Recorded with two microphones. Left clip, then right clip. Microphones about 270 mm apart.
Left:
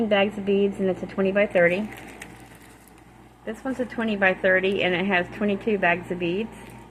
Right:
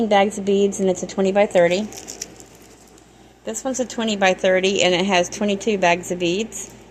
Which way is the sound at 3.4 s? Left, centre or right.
Right.